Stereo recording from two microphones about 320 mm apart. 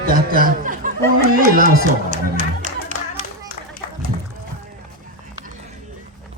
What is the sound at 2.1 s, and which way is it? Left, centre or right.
Music, right.